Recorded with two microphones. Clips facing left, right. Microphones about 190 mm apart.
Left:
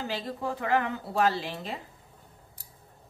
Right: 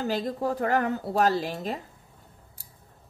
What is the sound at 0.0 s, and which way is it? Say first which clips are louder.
Speech: right 5 dB; 40° right (ahead or behind).